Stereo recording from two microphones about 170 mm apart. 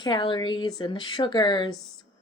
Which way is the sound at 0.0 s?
25° left (ahead or behind).